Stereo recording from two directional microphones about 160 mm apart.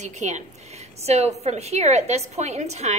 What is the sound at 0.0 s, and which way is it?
A woman's voice, 45° right (ahead or behind).